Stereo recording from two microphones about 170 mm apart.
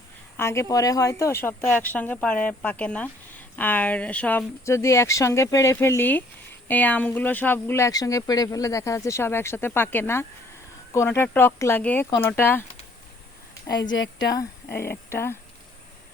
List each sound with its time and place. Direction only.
0.3 s a woman's voice: 15° left (ahead or behind)
13.5 s a sound: 20° left (ahead or behind)
13.8 s speech: 90° left
14.2 s a woman's voice: 20° left (ahead or behind)